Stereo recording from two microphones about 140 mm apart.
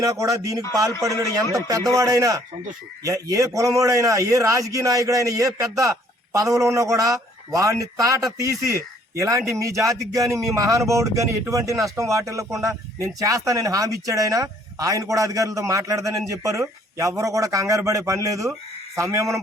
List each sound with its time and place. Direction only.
0.0 s speech: 25° right (ahead or behind)